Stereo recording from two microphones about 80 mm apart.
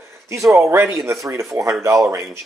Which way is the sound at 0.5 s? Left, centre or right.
Right.